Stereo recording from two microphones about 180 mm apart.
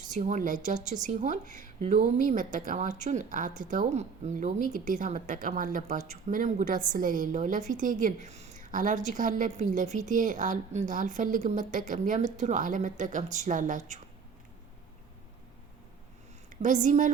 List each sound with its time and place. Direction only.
0.1 s speech: 45° right (ahead or behind)
16.5 s a woman's voice: 45° right (ahead or behind)